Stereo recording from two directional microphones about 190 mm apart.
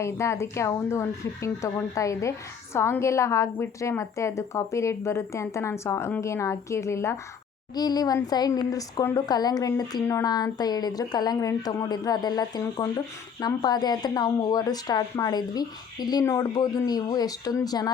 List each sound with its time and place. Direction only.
0.0 s a woman's voice: 15° left (ahead or behind)